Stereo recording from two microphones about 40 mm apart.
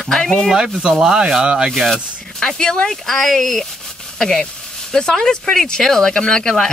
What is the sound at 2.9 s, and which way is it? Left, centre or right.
Speech, centre.